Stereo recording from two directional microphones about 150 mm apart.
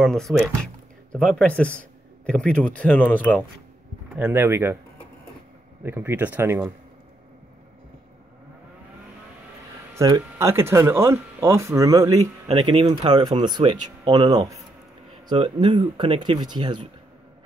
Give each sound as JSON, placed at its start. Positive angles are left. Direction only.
{"t": 0.0, "sound": "speech", "side_deg": 5}
{"t": 4.1, "sound": "speech", "side_deg": -10}
{"t": 5.9, "sound": "speech", "side_deg": -15}
{"t": 9.9, "sound": "speech", "side_deg": -25}